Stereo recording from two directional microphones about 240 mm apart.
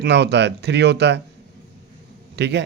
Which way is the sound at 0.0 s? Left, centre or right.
Right.